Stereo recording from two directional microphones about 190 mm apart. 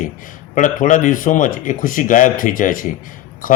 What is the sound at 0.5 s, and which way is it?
A man's voice, 45° left (ahead or behind).